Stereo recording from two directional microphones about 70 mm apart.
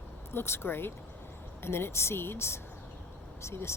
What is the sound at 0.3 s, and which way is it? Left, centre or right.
Speech, left.